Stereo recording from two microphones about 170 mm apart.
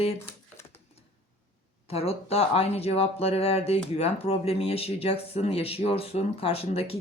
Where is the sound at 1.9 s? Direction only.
35° left (ahead or behind).